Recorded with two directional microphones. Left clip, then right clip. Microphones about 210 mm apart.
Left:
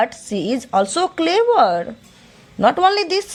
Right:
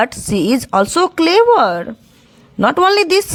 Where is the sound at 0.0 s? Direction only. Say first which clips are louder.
Right 4 dB; 25° right (ahead or behind).